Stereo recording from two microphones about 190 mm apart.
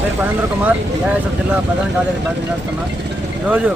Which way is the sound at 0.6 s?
10° right (ahead or behind).